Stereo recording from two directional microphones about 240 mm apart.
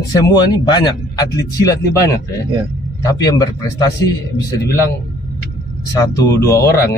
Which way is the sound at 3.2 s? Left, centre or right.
Centre.